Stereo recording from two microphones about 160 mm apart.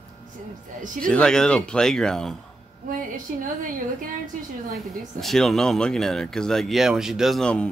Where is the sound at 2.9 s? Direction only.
55° right (ahead or behind).